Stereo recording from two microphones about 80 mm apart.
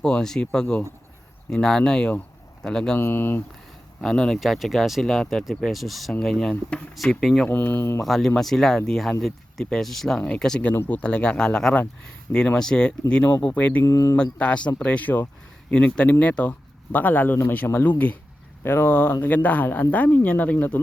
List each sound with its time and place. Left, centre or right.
0.0 s speech: centre
3.0 s speech: left
4.0 s speech: centre
6.9 s speech: centre
7.4 s speech: left
8.0 s speech: centre
13.8 s speech: left
14.2 s speech: centre
18.6 s speech: left